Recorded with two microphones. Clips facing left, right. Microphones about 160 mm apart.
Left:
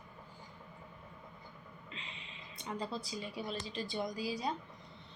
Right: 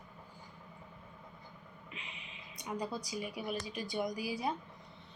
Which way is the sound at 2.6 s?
15° right (ahead or behind).